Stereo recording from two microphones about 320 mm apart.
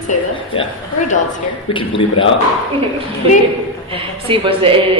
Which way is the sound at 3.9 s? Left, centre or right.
Centre.